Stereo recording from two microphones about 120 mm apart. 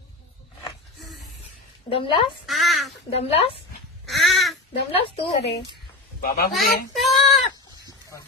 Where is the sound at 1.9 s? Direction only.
50° left (ahead or behind).